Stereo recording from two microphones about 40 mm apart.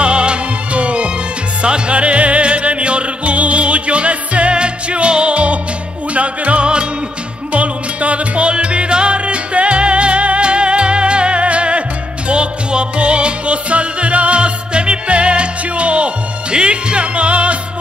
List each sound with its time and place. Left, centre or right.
0.0 s music: right